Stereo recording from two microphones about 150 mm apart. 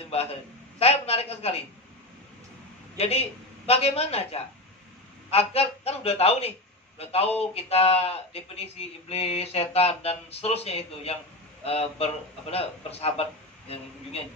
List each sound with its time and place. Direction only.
0.0 s a man's voice: 40° left (ahead or behind)
3.0 s a woman's voice: 45° left (ahead or behind)